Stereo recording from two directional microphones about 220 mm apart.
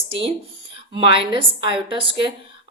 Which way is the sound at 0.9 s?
25° right (ahead or behind).